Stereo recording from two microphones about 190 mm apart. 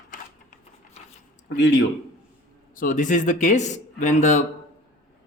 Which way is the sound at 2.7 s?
45° left (ahead or behind).